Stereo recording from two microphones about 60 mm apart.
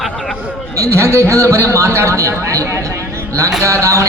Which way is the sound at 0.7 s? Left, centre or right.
Right.